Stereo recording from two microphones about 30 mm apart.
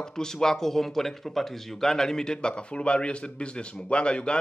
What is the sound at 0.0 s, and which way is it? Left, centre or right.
A man's voice, left.